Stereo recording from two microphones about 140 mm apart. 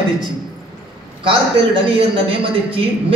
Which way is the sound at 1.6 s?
40° right (ahead or behind).